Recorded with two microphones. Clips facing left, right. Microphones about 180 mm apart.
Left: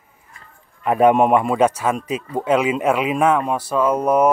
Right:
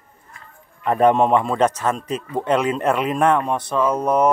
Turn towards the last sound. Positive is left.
turn(degrees=10)  # may be behind; listen again after turning